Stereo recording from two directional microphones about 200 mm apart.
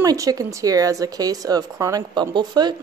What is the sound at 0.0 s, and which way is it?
Speech, 15° right (ahead or behind).